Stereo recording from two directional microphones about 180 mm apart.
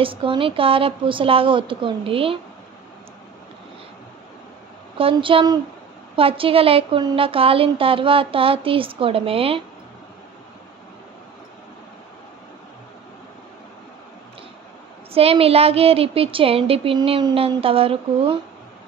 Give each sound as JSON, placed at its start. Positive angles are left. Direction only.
{"t": 0.0, "sound": "a woman's voice", "side_deg": -30}
{"t": 4.9, "sound": "a woman's voice", "side_deg": -30}
{"t": 15.1, "sound": "a woman's voice", "side_deg": -35}